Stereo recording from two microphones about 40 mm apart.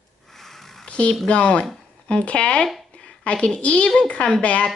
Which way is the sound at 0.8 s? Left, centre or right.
Left.